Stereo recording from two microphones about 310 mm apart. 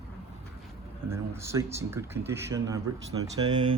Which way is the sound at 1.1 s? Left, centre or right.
Centre.